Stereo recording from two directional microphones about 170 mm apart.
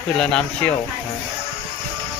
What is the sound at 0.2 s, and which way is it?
Speech, 5° left (ahead or behind).